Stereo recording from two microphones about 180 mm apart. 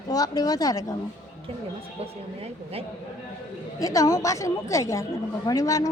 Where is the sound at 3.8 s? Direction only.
20° left (ahead or behind).